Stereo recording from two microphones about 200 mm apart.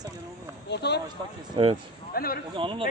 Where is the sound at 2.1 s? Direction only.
45° left (ahead or behind).